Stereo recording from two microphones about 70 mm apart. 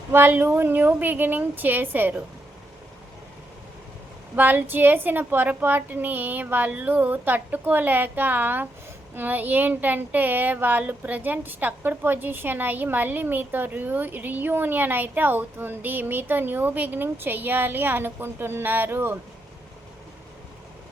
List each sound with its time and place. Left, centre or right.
0.1 s speech: right
4.4 s speech: right